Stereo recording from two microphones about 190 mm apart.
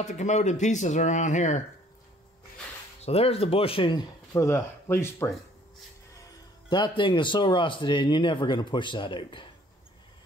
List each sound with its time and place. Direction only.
0.0 s speech: 40° left (ahead or behind)
3.0 s speech: 30° left (ahead or behind); by 5.3 s 15° left (ahead or behind)
6.7 s speech: 25° left (ahead or behind)